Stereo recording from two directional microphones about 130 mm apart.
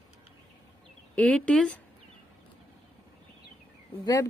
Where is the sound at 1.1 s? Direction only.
10° left (ahead or behind).